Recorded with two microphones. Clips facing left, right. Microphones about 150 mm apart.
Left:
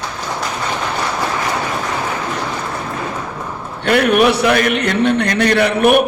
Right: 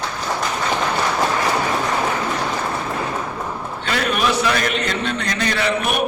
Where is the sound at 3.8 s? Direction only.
65° left (ahead or behind).